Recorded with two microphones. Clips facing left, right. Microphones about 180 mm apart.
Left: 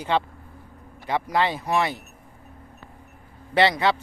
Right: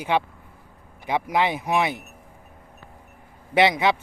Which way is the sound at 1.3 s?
15° right (ahead or behind).